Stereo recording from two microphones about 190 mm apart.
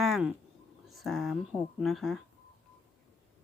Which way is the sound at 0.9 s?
Centre (ahead or behind).